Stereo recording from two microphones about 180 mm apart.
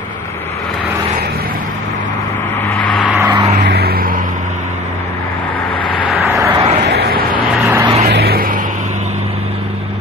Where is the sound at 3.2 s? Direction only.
15° right (ahead or behind).